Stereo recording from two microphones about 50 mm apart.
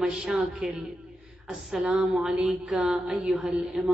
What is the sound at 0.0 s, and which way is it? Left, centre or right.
A man's voice, centre.